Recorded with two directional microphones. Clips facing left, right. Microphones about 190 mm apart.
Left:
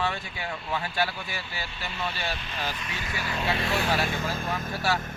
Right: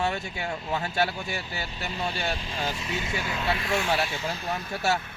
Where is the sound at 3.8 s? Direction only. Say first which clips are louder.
Even; 50° left (ahead or behind).